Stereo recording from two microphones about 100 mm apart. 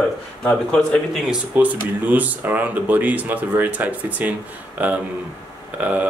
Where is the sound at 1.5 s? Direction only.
15° right (ahead or behind).